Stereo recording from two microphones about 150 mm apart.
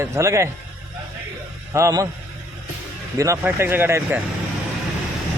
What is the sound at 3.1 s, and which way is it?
Speech, 20° right (ahead or behind).